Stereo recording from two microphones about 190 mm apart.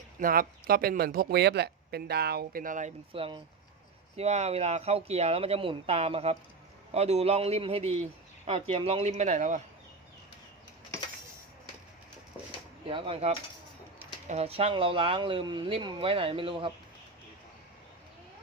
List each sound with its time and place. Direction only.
0.2 s speech: 50° right (ahead or behind)
3.1 s speech: 30° right (ahead or behind)
12.9 s speech: 30° right (ahead or behind)